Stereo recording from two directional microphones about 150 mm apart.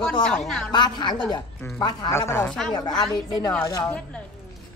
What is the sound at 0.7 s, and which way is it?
Speech, 30° left (ahead or behind).